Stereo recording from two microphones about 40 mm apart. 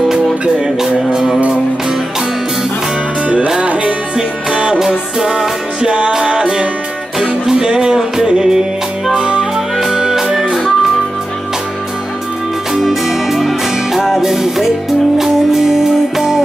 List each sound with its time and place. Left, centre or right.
0.7 s music: centre
3.6 s music: right; by 10.4 s centre
12.8 s music: centre